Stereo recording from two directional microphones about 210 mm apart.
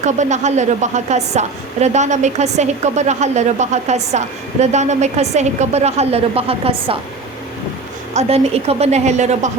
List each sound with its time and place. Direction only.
0.0 s a woman's voice: 35° right (ahead or behind)
8.1 s a woman's voice: 30° right (ahead or behind)